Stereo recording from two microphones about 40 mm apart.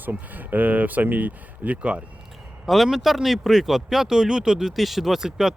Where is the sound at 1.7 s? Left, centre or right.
Right.